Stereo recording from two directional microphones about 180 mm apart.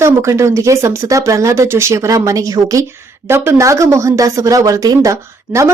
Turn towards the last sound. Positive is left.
turn(degrees=-15)  # may be behind; listen again after turning